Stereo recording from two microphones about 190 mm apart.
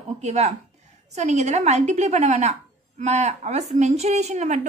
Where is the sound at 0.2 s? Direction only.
35° right (ahead or behind).